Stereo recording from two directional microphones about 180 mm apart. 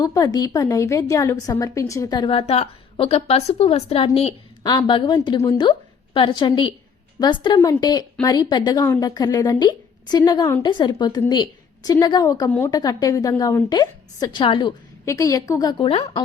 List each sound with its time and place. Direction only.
0.0 s a woman's voice: 20° left (ahead or behind)
15.9 s a woman's voice: 30° left (ahead or behind)